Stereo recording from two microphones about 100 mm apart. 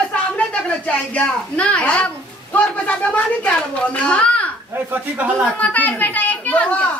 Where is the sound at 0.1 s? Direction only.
10° left (ahead or behind).